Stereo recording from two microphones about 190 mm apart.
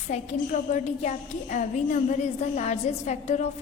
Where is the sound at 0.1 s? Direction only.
40° left (ahead or behind).